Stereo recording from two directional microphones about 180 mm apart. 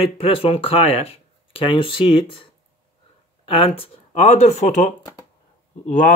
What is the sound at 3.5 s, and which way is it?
Speech, 30° left (ahead or behind).